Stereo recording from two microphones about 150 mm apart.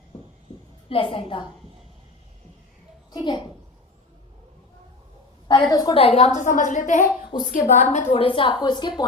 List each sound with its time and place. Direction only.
0.9 s a woman's voice: 35° left (ahead or behind)
3.1 s a woman's voice: 30° left (ahead or behind)
5.7 s a woman's voice: 25° left (ahead or behind)
6.0 s a woman's voice: 45° left (ahead or behind); by 8.0 s 65° left (ahead or behind)
8.1 s a woman's voice: 35° left (ahead or behind)